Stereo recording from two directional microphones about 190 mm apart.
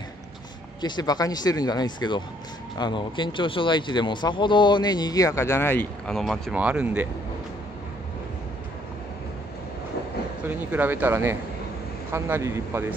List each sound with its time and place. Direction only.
0.7 s speech: 25° left (ahead or behind); by 7.1 s 5° right (ahead or behind)
10.7 s speech: 10° right (ahead or behind)